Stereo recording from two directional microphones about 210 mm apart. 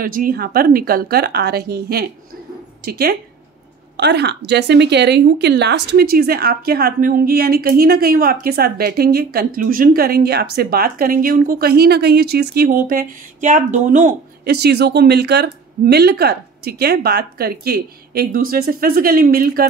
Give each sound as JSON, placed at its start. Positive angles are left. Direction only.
{"t": 0.0, "sound": "a woman's voice", "side_deg": -40}